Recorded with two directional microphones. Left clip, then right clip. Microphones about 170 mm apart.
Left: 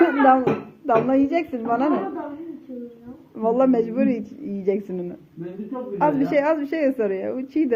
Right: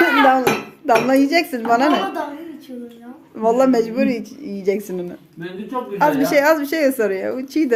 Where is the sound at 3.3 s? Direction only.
25° right (ahead or behind).